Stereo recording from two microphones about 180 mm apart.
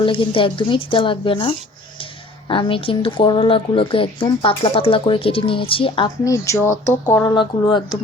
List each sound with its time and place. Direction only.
0.0 s a woman's voice: 30° left (ahead or behind)
6.2 s speech: 15° left (ahead or behind)